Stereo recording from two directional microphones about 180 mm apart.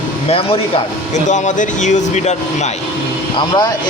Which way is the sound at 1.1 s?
40° left (ahead or behind).